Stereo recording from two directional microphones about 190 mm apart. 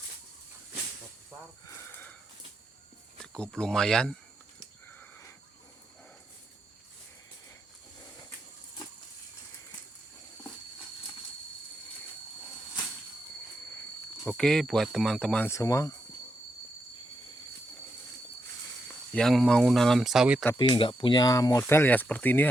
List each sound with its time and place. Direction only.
1.6 s a sound: 15° left (ahead or behind)
3.3 s speech: 5° left (ahead or behind)
4.9 s sniff: 10° left (ahead or behind)
14.3 s speech: 5° left (ahead or behind)
19.1 s speech: centre (ahead or behind)
20.6 s speech: 25° left (ahead or behind); by 22.4 s 10° left (ahead or behind)